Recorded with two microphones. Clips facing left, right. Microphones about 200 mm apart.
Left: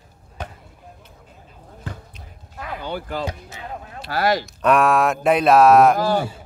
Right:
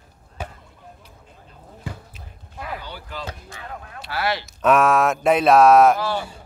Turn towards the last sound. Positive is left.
turn(degrees=45)  # may be behind; listen again after turning